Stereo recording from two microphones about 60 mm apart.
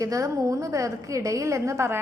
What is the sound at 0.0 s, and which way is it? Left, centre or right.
A woman's voice, right.